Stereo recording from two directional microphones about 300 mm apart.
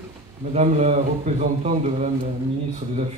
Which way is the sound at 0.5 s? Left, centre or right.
Right.